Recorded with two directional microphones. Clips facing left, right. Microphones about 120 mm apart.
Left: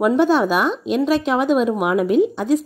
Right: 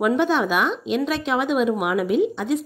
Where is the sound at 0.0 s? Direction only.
40° left (ahead or behind).